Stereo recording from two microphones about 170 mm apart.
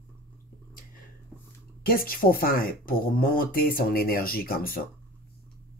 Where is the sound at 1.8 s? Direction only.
60° left (ahead or behind).